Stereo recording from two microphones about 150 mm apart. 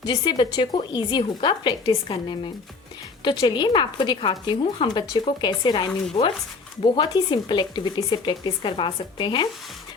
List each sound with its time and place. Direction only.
0.0 s speech: 30° left (ahead or behind)
6.9 s speech: 30° left (ahead or behind)